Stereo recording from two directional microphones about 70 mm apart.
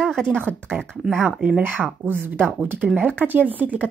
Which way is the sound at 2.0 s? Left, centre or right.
Right.